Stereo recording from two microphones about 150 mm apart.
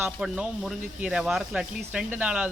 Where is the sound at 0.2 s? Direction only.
5° right (ahead or behind).